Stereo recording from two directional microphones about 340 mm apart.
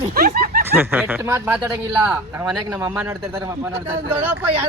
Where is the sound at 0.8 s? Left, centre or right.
Centre.